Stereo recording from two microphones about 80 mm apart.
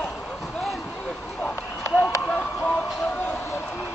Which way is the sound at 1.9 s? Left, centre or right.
Left.